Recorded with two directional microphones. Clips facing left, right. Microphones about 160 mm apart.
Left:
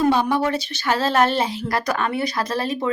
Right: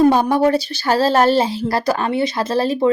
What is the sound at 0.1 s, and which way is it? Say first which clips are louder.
Speech: right 5 dB; 45° right (ahead or behind).